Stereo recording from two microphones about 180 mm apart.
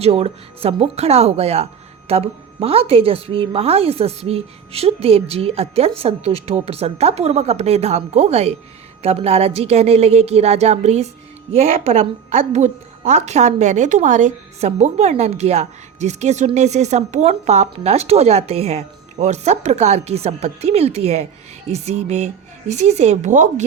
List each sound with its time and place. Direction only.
0.0 s a woman's voice: 35° right (ahead or behind)